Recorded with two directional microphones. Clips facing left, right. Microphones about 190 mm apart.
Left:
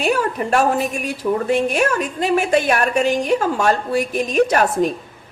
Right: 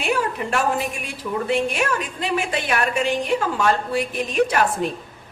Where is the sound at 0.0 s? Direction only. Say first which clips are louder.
Left 4 dB; 45° left (ahead or behind).